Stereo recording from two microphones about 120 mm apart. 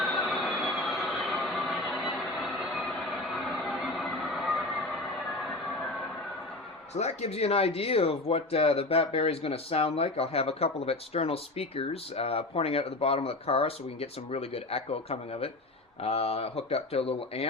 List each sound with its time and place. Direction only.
0.0 s vehicle: centre (ahead or behind)
3.3 s a sound: centre (ahead or behind)
6.9 s speech: 65° left (ahead or behind)